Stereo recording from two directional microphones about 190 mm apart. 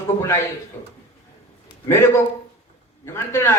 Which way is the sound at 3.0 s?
15° left (ahead or behind).